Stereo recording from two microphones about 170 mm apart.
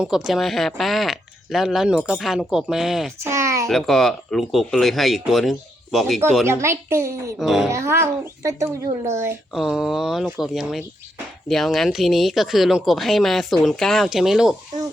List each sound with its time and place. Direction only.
0.0 s speech: centre (ahead or behind)
3.2 s a sound: 15° right (ahead or behind)
3.7 s speech: centre (ahead or behind)
6.5 s speech: 15° right (ahead or behind)
7.3 s speech: centre (ahead or behind)
7.7 s speech: 15° right (ahead or behind)
9.6 s speech: centre (ahead or behind)